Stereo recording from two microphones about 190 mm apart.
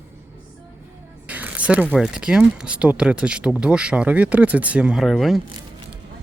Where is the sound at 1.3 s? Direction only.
10° right (ahead or behind).